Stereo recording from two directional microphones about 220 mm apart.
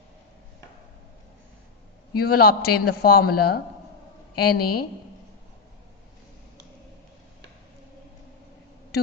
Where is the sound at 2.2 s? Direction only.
45° left (ahead or behind).